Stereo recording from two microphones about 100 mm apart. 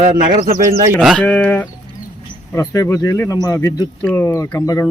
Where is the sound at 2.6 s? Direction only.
35° left (ahead or behind).